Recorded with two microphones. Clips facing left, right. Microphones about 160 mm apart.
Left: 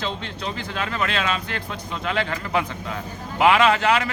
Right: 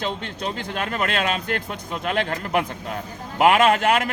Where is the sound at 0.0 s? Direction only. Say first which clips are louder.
Right 2 dB; 50° right (ahead or behind).